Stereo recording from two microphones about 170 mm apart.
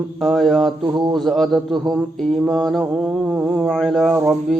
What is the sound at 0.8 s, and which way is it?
Speech, 20° right (ahead or behind).